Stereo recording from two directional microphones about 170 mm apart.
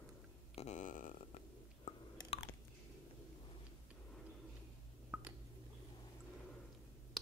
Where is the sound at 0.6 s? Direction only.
45° left (ahead or behind).